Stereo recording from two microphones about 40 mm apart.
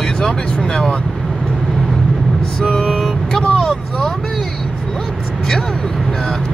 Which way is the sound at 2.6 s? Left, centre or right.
Centre.